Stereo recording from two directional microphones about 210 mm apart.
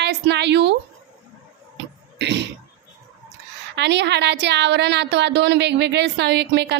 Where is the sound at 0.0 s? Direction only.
55° right (ahead or behind).